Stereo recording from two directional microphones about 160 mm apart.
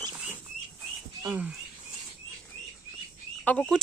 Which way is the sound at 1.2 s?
10° right (ahead or behind).